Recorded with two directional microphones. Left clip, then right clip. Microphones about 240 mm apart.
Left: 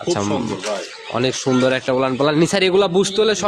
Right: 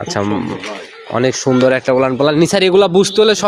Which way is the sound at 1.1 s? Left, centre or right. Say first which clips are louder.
Right 5 dB; centre.